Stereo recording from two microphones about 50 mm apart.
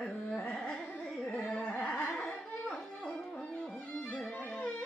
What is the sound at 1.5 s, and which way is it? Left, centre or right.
Carnatic music, left.